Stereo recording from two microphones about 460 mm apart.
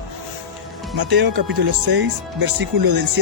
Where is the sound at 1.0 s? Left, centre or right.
Right.